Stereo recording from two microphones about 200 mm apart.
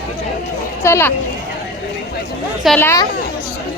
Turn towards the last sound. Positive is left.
turn(degrees=15)  # may be behind; listen again after turning